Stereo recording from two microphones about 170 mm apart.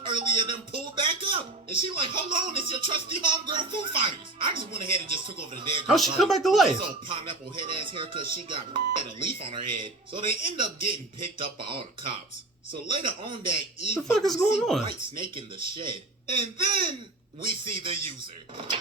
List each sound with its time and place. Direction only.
0.0 s a sound: 30° right (ahead or behind)
3.4 s speech: 30° right (ahead or behind)
5.9 s speech: centre (ahead or behind)
7.1 s speech: 30° right (ahead or behind)
14.1 s speech: centre (ahead or behind)
15.4 s speech: 30° right (ahead or behind)